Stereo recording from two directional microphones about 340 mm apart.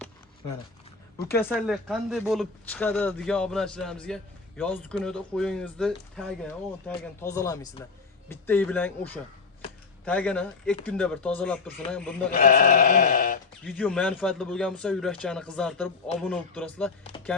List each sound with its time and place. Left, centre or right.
1.3 s speech: centre
12.3 s sheep: left
13.7 s speech: centre
17.1 s chopping: centre